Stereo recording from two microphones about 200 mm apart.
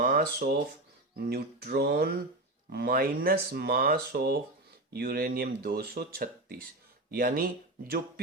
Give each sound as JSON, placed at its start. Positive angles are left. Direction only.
{"t": 0.0, "sound": "speech", "side_deg": -50}